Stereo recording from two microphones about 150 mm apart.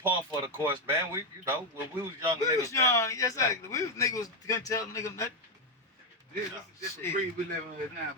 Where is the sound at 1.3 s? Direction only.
20° right (ahead or behind).